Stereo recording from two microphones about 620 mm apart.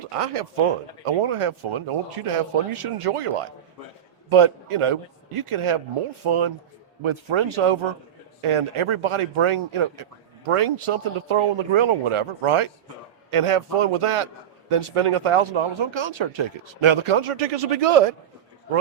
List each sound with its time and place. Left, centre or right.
0.0 s a man's voice: right